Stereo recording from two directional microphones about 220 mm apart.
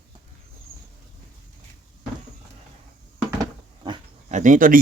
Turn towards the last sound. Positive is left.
turn(degrees=-40)  # may be behind; listen again after turning